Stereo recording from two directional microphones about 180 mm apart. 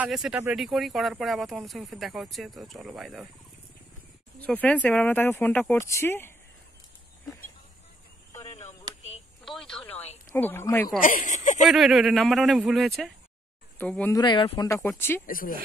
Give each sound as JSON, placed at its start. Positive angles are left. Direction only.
{"t": 0.0, "sound": "speech", "side_deg": -5}
{"t": 4.4, "sound": "speech", "side_deg": 10}
{"t": 9.4, "sound": "telephone", "side_deg": 0}
{"t": 10.3, "sound": "speech", "side_deg": 10}
{"t": 11.0, "sound": "speech", "side_deg": 50}
{"t": 11.6, "sound": "speech", "side_deg": 0}
{"t": 14.1, "sound": "speech", "side_deg": 25}
{"t": 14.7, "sound": "speech", "side_deg": 15}
{"t": 15.2, "sound": "speech", "side_deg": 50}